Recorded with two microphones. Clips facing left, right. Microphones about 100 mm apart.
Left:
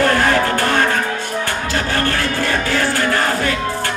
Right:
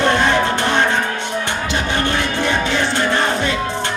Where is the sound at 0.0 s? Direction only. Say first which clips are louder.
Even; 20° right (ahead or behind).